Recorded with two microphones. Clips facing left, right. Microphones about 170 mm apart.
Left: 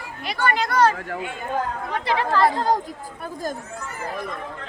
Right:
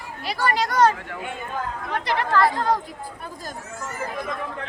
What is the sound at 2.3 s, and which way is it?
Chatter, 30° left (ahead or behind).